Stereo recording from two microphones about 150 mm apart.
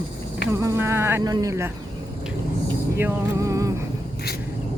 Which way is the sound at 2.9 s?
20° right (ahead or behind).